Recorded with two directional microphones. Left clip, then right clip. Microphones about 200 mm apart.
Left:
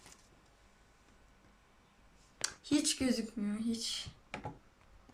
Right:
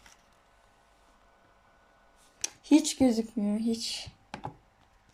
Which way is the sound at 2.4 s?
15° right (ahead or behind).